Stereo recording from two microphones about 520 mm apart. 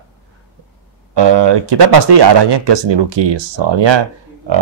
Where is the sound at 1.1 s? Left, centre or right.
Right.